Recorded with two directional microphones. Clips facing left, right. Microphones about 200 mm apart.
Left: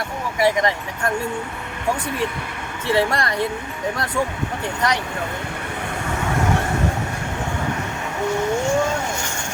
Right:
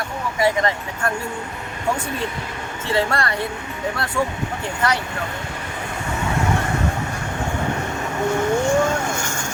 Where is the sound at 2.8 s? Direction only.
15° left (ahead or behind).